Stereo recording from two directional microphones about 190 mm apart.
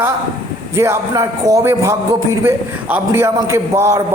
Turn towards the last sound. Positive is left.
turn(degrees=-15)  # may be behind; listen again after turning